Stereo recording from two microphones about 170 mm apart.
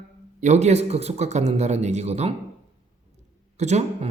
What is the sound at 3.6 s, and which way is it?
Speech, 40° right (ahead or behind).